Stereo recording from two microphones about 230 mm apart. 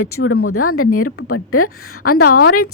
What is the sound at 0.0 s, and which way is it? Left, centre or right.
Speech, left.